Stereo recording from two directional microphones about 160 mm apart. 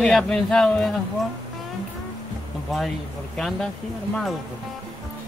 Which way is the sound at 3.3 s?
Centre (ahead or behind).